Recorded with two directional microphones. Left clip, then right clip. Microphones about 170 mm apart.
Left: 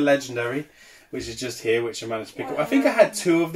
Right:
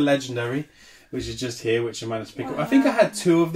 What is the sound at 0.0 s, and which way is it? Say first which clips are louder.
Speech: left 1 dB; 15° right (ahead or behind).